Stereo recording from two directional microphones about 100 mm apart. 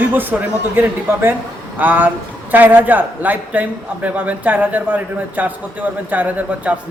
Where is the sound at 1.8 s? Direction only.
20° right (ahead or behind).